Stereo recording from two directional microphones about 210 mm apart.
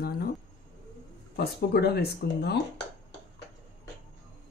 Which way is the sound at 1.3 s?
50° left (ahead or behind).